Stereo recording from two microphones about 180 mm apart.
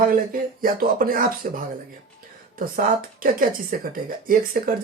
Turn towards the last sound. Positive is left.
turn(degrees=-55)  # may be behind; listen again after turning